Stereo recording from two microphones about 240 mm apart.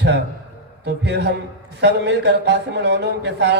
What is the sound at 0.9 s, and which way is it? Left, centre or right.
A man's voice, right.